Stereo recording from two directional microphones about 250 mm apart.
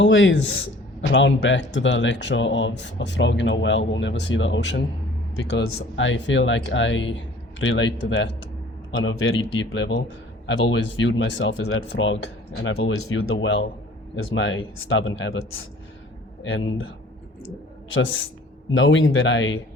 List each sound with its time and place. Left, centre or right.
0.0 s speech: left
11.0 s speech: left
12.9 s speech: left
13.4 s speech: left